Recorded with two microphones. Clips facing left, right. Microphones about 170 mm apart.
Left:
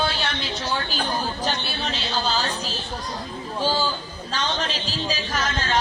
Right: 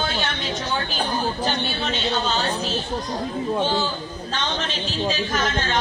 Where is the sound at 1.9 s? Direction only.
35° left (ahead or behind).